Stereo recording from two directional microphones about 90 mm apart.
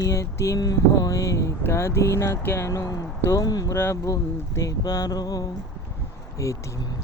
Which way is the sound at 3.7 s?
30° left (ahead or behind).